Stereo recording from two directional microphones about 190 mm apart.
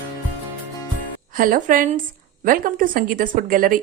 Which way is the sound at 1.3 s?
45° right (ahead or behind).